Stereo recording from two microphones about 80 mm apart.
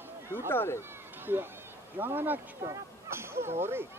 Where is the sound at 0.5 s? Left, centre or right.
Left.